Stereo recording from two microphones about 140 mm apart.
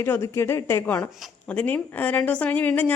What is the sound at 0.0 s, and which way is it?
Speech, 15° left (ahead or behind).